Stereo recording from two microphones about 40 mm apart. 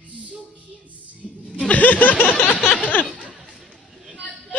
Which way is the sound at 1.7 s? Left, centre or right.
Left.